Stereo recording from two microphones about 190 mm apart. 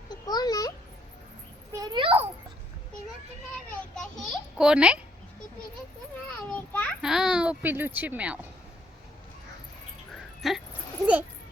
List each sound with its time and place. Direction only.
0.1 s a sound: 20° left (ahead or behind)
1.7 s a sound: 20° right (ahead or behind)
3.9 s a child's voice: centre (ahead or behind)
6.5 s children playing: 10° left (ahead or behind)
7.0 s speech: 5° right (ahead or behind)
10.4 s a child's voice: centre (ahead or behind)